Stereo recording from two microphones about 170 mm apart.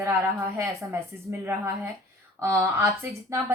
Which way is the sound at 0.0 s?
15° right (ahead or behind).